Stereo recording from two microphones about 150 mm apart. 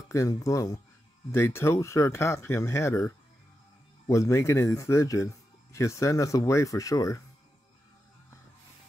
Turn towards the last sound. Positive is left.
turn(degrees=20)  # may be behind; listen again after turning